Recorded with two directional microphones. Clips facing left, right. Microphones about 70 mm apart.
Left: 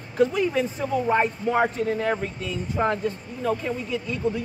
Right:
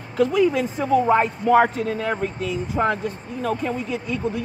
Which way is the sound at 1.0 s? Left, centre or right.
Right.